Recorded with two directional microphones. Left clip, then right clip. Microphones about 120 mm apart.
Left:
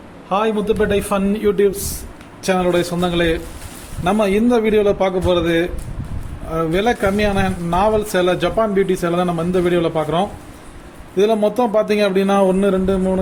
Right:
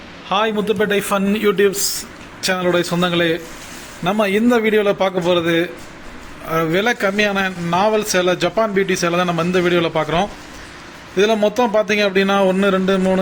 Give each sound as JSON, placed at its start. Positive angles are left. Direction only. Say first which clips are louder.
{"t": 0.3, "sound": "a man's voice", "louder": "even", "side_deg": 5}